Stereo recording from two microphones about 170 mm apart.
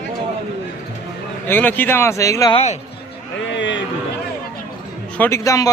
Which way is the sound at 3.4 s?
90° left.